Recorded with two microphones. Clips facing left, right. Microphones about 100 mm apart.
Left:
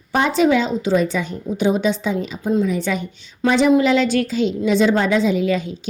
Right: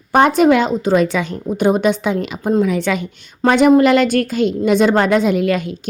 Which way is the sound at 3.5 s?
55° right (ahead or behind).